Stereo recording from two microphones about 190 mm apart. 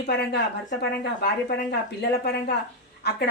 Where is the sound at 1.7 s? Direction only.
60° left (ahead or behind).